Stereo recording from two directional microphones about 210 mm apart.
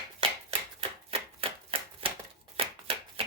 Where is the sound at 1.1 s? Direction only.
25° right (ahead or behind).